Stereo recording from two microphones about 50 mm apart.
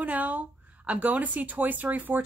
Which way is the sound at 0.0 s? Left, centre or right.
Right.